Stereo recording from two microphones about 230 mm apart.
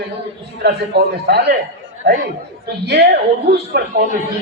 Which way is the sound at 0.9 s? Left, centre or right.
Right.